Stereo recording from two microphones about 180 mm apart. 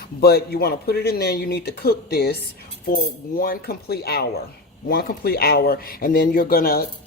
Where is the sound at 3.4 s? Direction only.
55° left (ahead or behind).